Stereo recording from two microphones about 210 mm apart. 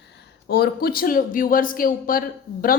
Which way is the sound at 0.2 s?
50° left (ahead or behind).